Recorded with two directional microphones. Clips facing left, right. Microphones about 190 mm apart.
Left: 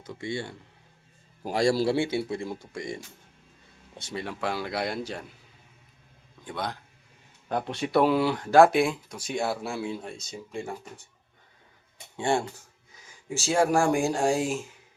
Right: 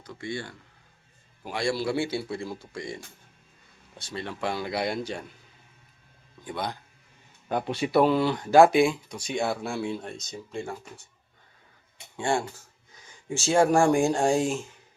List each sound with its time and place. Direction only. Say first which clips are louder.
0.0 s speech: left 2 dB; 25° left (ahead or behind)
1.4 s a man's voice: left 5 dB; 40° left (ahead or behind)
2.0 s speech: left 2 dB; 25° left (ahead or behind)
4.2 s speech: even; 5° left (ahead or behind)
6.4 s speech: right 1 dB; centre (ahead or behind)
12.1 s speech: left 1 dB; 20° left (ahead or behind)
13.1 s speech: right 2 dB; centre (ahead or behind)